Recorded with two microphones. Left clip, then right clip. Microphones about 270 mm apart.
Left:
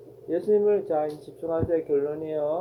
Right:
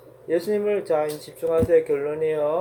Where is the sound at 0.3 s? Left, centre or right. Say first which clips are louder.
Even; right.